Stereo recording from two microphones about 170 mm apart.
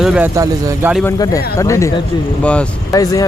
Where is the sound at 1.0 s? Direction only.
20° left (ahead or behind).